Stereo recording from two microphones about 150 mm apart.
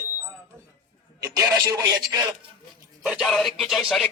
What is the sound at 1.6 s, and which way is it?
Speech, 25° right (ahead or behind).